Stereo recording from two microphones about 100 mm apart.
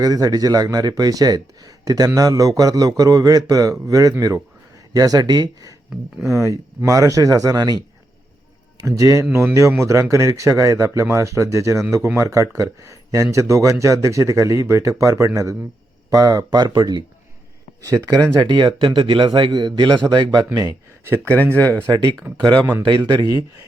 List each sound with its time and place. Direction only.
0.0 s a man's voice: 40° right (ahead or behind)
4.9 s a man's voice: 40° right (ahead or behind)
6.3 s a man's voice: 30° right (ahead or behind)
9.0 s a man's voice: 35° right (ahead or behind)
18.4 s a man's voice: 50° right (ahead or behind)
21.5 s speech: 15° left (ahead or behind)
22.3 s speech: 15° right (ahead or behind)
22.9 s a man's voice: 40° right (ahead or behind)